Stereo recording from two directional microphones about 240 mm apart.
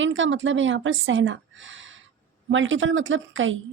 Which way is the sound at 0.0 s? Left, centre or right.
Right.